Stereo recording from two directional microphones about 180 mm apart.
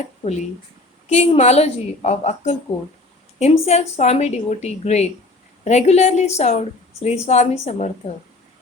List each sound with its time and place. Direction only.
1.0 s a woman's voice: 35° left (ahead or behind)